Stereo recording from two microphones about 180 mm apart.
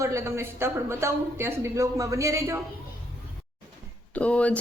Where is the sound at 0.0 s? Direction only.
15° right (ahead or behind).